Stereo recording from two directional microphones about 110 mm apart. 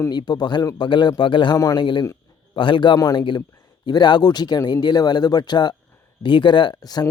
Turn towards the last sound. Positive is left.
turn(degrees=35)  # may be behind; listen again after turning